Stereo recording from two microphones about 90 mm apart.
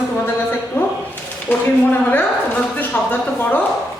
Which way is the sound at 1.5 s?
20° left (ahead or behind).